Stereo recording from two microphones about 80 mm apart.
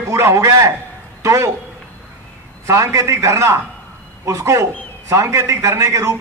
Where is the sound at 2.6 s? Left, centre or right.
Right.